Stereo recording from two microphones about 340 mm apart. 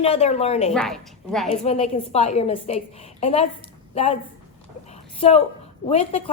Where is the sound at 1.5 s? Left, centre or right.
Centre.